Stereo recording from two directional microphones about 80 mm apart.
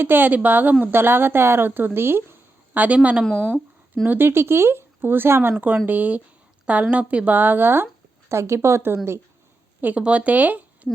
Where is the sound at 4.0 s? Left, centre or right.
Right.